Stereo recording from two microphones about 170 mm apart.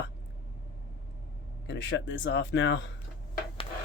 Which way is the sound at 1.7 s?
90° left.